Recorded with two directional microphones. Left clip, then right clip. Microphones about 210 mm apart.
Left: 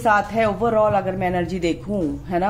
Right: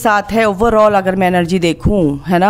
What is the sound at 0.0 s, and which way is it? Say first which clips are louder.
Speech: right 5 dB; 45° right (ahead or behind).